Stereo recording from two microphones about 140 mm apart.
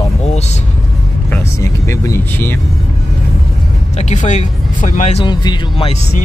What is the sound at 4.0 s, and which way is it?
Speech, 60° left (ahead or behind).